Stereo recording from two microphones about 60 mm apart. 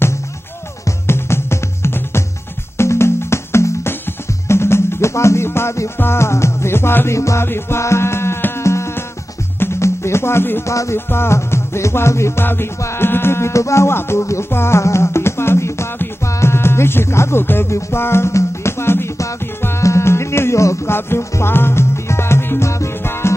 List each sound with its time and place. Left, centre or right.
1.0 s music: left
7.2 s music: left
7.4 s music: left
8.6 s insect: left
9.6 s music: left
10.6 s music: left
11.1 s music: left